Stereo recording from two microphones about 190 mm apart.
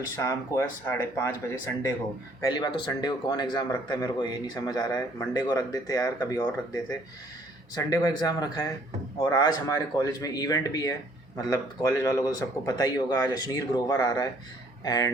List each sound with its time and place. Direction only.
0.2 s speech: 15° left (ahead or behind)
2.4 s a man's voice: 20° left (ahead or behind)